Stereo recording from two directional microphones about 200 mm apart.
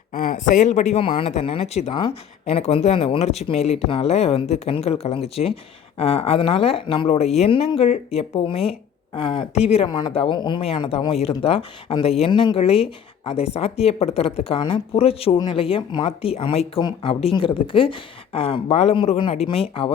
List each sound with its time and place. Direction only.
0.1 s speech: 40° left (ahead or behind)